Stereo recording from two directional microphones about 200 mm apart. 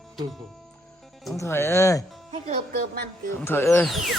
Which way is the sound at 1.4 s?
15° left (ahead or behind).